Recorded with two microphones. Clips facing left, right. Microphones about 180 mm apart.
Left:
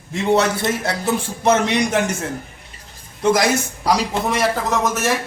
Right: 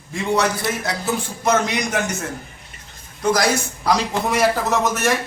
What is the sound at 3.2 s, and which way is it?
Speech, 25° left (ahead or behind).